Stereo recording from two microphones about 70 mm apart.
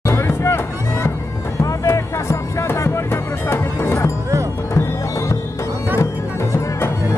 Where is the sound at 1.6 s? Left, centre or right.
Left.